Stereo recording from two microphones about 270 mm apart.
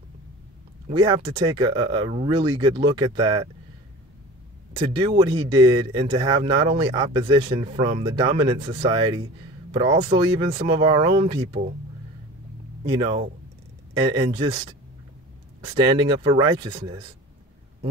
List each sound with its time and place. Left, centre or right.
0.8 s speech: centre
4.7 s speech: centre
12.9 s speech: centre
15.7 s speech: centre